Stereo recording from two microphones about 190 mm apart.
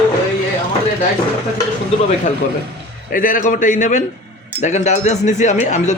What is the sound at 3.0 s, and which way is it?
Speech, 45° left (ahead or behind).